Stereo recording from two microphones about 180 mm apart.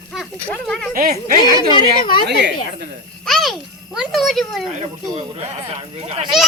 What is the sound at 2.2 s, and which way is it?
Speech, 70° right (ahead or behind).